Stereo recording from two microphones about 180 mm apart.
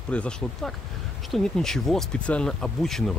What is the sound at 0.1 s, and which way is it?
Speech, 5° left (ahead or behind).